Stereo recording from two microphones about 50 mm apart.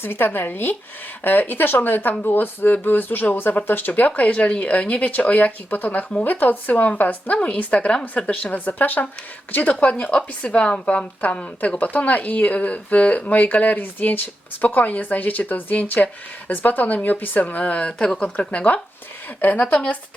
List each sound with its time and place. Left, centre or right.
0.0 s a woman's voice: left
10.0 s a woman's voice: left